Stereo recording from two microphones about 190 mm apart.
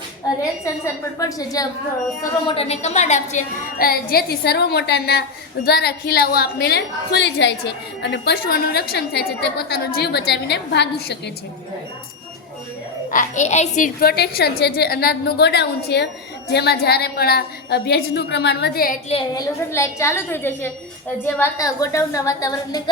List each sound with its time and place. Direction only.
1.2 s a woman's voice: 20° left (ahead or behind)
2.5 s a woman's voice: 30° left (ahead or behind); by 11.2 s 65° left (ahead or behind)
13.1 s a woman's voice: 40° left (ahead or behind)
19.3 s a woman's voice: 15° left (ahead or behind)